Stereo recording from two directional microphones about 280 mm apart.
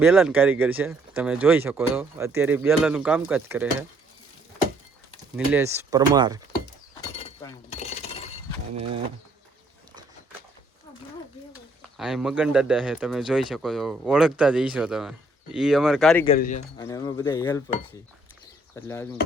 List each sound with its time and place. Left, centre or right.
0.0 s speech: centre
5.5 s speech: centre
7.2 s chink: left
11.9 s speech: centre
16.4 s speech: left
16.7 s speech: centre
18.8 s speech: centre